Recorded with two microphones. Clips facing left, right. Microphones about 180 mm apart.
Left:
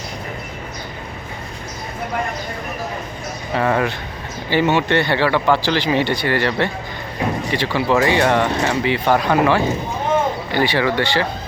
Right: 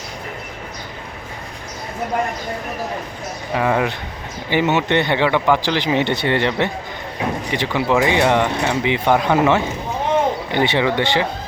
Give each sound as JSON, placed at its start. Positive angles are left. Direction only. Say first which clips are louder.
{"t": 3.5, "sound": "speech", "louder": "even", "side_deg": -10}